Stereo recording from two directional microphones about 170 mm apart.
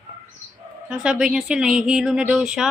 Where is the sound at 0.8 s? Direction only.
5° right (ahead or behind).